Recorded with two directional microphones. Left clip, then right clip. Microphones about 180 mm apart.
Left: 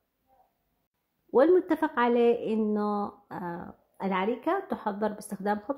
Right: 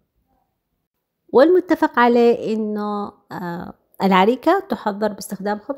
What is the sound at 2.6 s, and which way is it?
Speech, 20° right (ahead or behind).